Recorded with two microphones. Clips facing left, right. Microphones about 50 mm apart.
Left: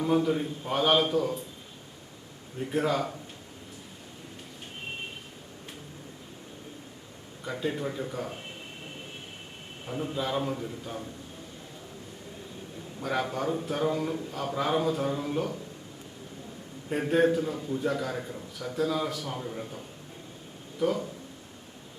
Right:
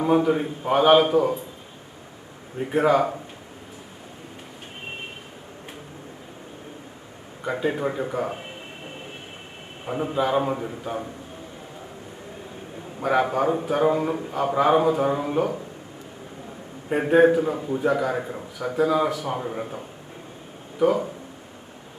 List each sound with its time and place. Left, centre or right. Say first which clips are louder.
0.0 s a man's voice: right 6 dB; right
2.6 s a man's voice: right 8 dB; right
7.4 s a man's voice: right 7 dB; right
9.8 s a man's voice: right 8 dB; right
13.0 s a man's voice: right 9 dB; right
16.9 s a man's voice: right 7 dB; right
19.4 s a man's voice: right 7 dB; right